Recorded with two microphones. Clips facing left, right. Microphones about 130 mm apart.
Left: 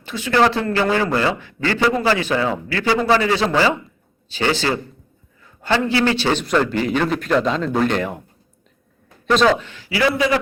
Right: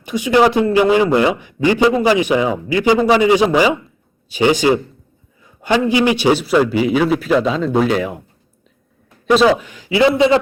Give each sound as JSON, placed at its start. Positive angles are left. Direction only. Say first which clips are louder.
{"t": 0.0, "sound": "a man's voice", "louder": "right 4 dB", "side_deg": -15}
{"t": 9.2, "sound": "a man's voice", "louder": "right 3 dB", "side_deg": -10}